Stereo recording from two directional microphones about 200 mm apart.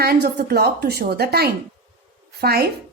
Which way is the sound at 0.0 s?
55° right (ahead or behind).